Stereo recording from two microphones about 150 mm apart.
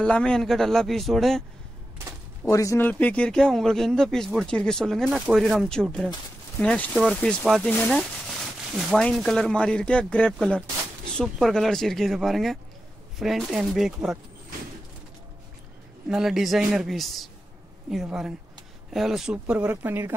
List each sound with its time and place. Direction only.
0.0 s speech: 5° left (ahead or behind)
2.5 s speech: 20° left (ahead or behind)
2.9 s speech: 10° left (ahead or behind)
16.1 s speech: centre (ahead or behind)